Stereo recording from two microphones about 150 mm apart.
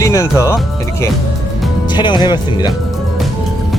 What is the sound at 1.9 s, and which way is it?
Speech, 30° left (ahead or behind).